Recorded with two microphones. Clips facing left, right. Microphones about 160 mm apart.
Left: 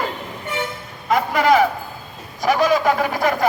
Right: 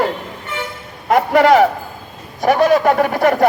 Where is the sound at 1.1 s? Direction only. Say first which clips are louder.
Right 5 dB; 65° right (ahead or behind).